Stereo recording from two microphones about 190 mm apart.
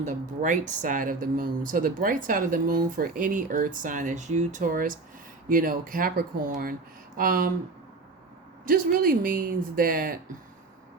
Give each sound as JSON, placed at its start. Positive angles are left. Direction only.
{"t": 0.0, "sound": "speech", "side_deg": -40}
{"t": 8.6, "sound": "speech", "side_deg": -50}